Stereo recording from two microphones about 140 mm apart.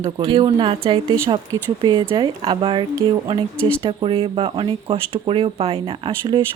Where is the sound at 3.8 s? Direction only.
40° right (ahead or behind).